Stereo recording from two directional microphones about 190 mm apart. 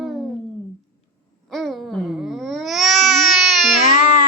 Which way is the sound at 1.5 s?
Centre (ahead or behind).